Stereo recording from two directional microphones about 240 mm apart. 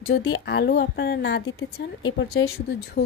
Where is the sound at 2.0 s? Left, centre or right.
Left.